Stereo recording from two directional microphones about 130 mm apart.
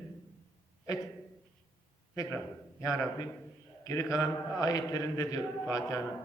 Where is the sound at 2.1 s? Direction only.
25° left (ahead or behind).